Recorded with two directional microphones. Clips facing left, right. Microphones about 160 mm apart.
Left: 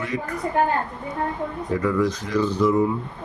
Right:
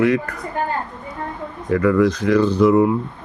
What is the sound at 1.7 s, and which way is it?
Speech, 70° right (ahead or behind).